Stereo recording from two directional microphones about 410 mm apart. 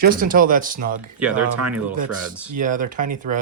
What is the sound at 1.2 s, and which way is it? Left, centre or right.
Speech, centre.